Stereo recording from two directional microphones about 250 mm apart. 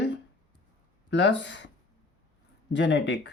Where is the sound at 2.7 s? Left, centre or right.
Left.